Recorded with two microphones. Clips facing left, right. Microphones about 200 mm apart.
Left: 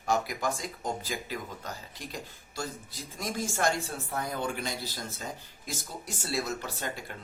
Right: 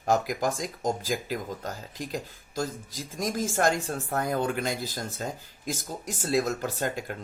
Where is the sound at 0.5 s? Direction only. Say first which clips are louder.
Right 5 dB; 90° right.